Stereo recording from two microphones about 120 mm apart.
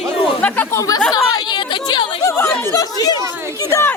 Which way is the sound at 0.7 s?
25° left (ahead or behind).